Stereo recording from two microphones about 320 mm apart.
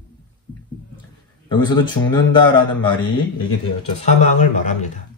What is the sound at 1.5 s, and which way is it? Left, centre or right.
Speech, centre.